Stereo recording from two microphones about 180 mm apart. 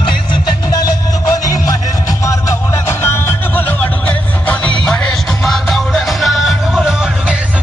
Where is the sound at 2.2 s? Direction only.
15° left (ahead or behind).